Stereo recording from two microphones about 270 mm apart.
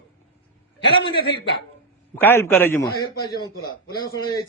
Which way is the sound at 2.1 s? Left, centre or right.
Centre.